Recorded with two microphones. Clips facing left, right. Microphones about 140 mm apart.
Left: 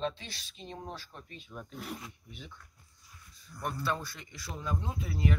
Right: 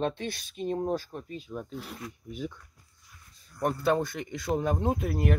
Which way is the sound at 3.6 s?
50° right (ahead or behind).